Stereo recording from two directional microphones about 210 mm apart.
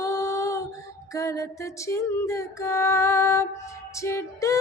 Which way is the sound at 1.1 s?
15° left (ahead or behind).